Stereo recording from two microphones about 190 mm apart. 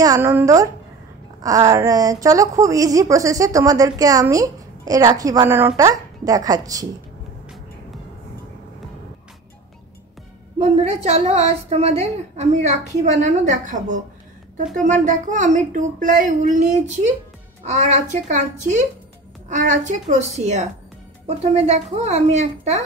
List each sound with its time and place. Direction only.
0.0 s a woman's voice: 15° right (ahead or behind)
10.6 s a woman's voice: 35° right (ahead or behind)